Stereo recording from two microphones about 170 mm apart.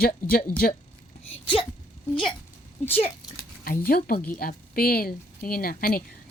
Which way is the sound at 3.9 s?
60° left (ahead or behind).